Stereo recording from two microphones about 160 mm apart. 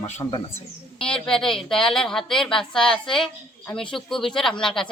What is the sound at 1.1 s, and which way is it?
A woman's voice, 5° left (ahead or behind).